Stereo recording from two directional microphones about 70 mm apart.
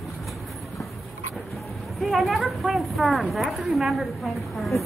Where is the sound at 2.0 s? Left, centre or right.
Centre.